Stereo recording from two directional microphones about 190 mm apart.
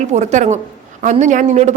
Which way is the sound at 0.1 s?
35° right (ahead or behind).